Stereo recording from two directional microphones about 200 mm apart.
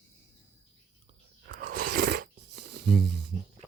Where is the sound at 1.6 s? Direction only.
40° right (ahead or behind).